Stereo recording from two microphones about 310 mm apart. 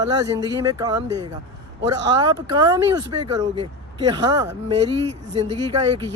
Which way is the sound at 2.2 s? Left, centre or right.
Centre.